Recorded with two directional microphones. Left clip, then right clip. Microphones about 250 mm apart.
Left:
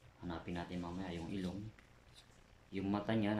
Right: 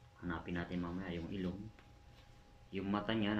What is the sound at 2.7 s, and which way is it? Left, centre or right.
Speech, centre.